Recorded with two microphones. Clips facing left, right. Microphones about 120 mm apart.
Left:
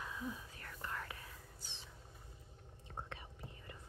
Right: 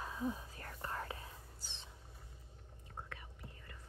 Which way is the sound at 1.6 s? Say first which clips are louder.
Even; centre (ahead or behind).